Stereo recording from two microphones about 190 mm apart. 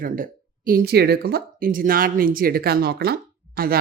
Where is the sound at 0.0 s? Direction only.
45° right (ahead or behind).